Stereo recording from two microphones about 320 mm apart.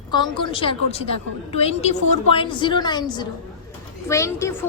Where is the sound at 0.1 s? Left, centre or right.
Centre.